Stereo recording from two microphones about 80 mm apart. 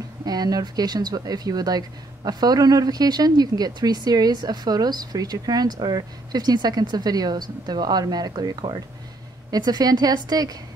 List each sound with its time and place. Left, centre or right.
0.2 s speech: right